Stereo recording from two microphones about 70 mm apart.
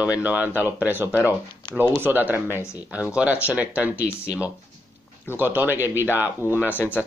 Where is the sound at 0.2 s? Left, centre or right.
Right.